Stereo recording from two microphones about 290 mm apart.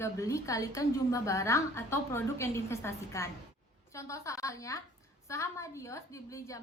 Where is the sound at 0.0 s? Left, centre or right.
Centre.